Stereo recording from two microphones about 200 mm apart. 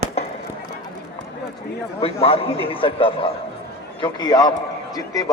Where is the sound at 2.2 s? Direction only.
30° left (ahead or behind).